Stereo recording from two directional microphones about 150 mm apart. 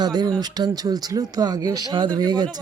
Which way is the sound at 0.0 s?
30° right (ahead or behind).